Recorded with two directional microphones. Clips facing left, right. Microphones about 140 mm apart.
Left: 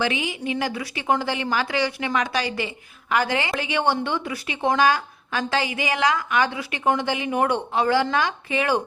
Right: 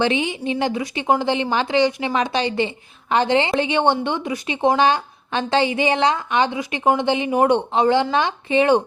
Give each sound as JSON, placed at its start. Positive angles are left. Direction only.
{"t": 0.0, "sound": "a woman's voice", "side_deg": -25}